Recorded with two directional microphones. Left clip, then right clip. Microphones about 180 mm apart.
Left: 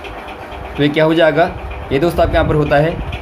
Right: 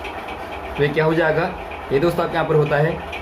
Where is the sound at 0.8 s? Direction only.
60° left (ahead or behind).